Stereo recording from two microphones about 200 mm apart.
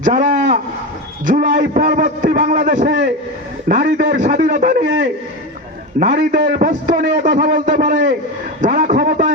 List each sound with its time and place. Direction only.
0.0 s a man's voice: 40° right (ahead or behind)
6.0 s a man's voice: 40° right (ahead or behind)